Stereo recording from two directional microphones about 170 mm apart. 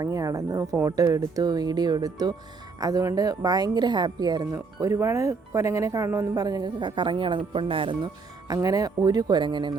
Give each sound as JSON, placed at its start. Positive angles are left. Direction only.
{"t": 0.0, "sound": "a woman's voice", "side_deg": -20}